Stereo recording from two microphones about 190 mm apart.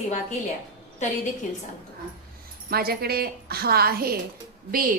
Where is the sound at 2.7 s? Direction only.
55° right (ahead or behind).